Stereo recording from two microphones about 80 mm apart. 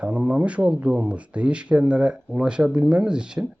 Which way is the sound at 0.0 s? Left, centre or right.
Centre.